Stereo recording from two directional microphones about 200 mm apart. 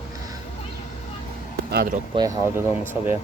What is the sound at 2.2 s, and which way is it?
Speech, 15° right (ahead or behind).